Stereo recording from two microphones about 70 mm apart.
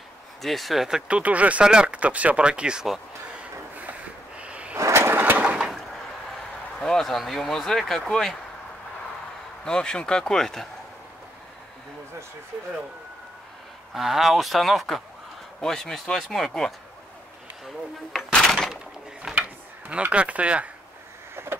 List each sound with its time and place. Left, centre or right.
0.4 s speech: centre
4.4 s a sound: centre
4.7 s vehicle: right
5.4 s a sound: centre
6.8 s speech: centre
9.7 s speech: centre
13.9 s speech: centre
18.5 s a sound: centre
19.2 s drawer open or close: centre
19.9 s speech: centre
21.4 s vehicle: right